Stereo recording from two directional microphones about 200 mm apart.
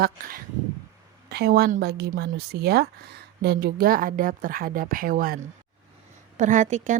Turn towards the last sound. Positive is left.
turn(degrees=-35)  # may be behind; listen again after turning